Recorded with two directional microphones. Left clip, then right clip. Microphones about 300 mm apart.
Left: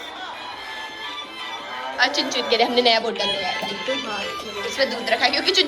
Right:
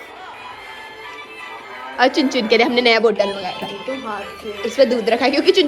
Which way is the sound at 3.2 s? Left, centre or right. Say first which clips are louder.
Even; left.